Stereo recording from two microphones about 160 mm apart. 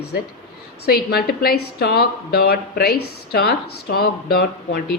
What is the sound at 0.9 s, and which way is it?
Speech, 75° left (ahead or behind).